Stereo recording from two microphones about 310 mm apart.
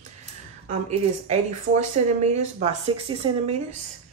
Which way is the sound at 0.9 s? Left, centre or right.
Right.